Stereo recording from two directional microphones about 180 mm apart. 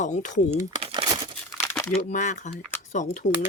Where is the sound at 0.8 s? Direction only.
25° right (ahead or behind).